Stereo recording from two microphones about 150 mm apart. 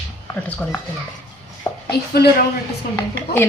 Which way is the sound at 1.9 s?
90° left.